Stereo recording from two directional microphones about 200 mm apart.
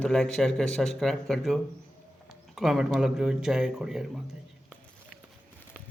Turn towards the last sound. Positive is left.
turn(degrees=0)  # may be behind; listen again after turning